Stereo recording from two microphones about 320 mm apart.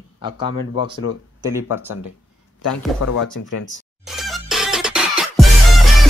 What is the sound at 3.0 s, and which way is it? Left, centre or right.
Speech, left.